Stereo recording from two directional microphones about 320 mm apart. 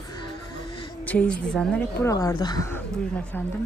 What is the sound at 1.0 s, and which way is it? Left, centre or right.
A woman's voice, centre.